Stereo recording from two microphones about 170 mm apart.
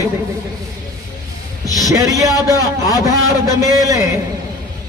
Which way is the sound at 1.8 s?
20° right (ahead or behind).